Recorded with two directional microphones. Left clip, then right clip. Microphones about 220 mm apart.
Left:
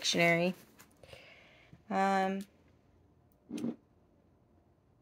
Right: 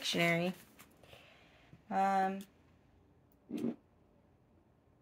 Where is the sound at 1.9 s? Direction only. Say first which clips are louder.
Left 1 dB; 40° left (ahead or behind).